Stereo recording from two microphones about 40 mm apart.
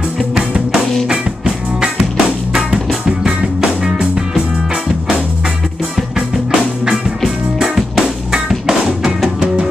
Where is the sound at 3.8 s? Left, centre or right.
Centre.